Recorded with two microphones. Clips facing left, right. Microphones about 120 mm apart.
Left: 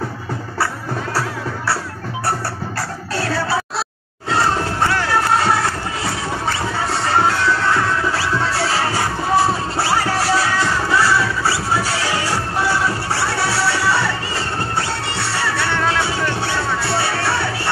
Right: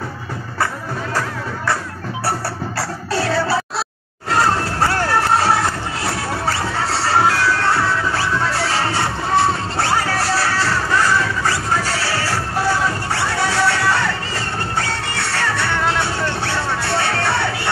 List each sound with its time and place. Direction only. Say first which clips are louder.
9.3 s music: left 1 dB; 5° left (ahead or behind)